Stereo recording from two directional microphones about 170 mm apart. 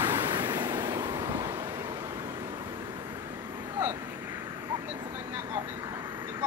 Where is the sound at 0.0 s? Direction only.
15° right (ahead or behind).